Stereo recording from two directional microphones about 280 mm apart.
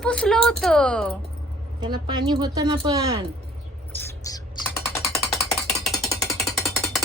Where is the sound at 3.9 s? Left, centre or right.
Centre.